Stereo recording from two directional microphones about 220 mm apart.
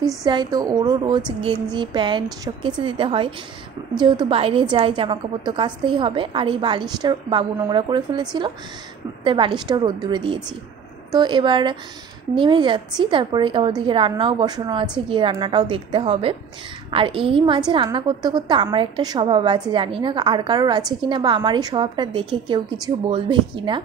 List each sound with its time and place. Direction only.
0.2 s a woman's voice: 20° right (ahead or behind)